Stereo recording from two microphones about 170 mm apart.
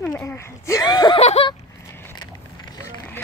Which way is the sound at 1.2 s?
40° left (ahead or behind).